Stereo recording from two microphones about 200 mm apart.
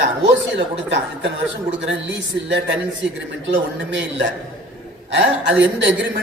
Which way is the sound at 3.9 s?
65° right (ahead or behind).